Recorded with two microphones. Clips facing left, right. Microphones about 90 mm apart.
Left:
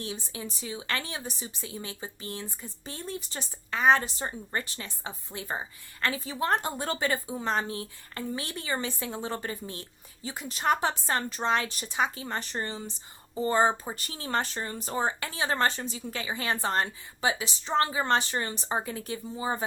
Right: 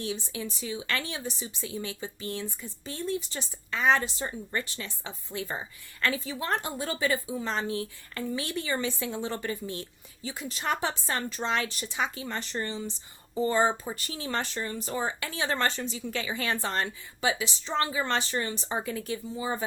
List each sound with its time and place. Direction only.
0.0 s a woman's voice: 30° left (ahead or behind)
3.0 s speech: 50° left (ahead or behind)
3.3 s a woman's voice: 25° left (ahead or behind); by 7.7 s 45° left (ahead or behind)
7.7 s a woman's voice: 35° left (ahead or behind)